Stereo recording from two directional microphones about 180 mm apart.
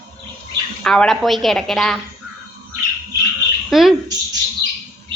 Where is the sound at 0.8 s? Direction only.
5° left (ahead or behind).